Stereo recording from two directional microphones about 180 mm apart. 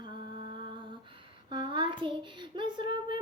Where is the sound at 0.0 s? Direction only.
25° right (ahead or behind).